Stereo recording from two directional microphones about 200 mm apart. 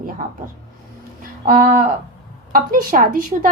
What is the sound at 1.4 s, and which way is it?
A woman's voice, 45° right (ahead or behind).